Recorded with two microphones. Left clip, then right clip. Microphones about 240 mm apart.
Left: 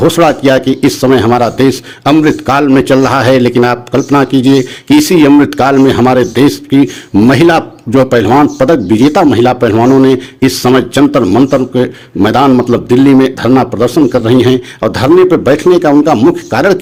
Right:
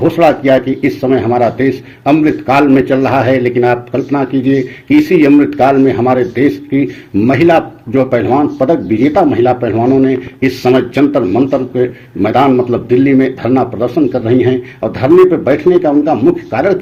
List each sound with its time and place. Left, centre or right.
0.2 s a man's voice: left